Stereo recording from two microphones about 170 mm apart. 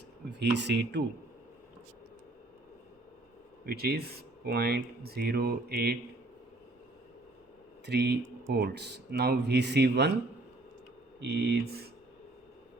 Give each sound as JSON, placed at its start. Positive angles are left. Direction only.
{"t": 0.3, "sound": "speech", "side_deg": -90}
{"t": 3.7, "sound": "speech", "side_deg": -70}
{"t": 7.9, "sound": "speech", "side_deg": -75}
{"t": 11.2, "sound": "speech", "side_deg": -75}